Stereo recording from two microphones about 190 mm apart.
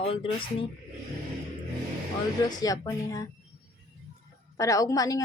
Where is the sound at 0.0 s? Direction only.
30° left (ahead or behind).